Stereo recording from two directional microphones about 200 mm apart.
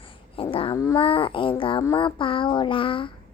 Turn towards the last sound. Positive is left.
turn(degrees=25)  # may be behind; listen again after turning